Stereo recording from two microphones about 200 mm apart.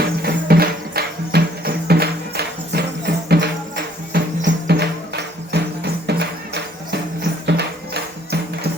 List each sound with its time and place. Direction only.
0.2 s music: 50° right (ahead or behind)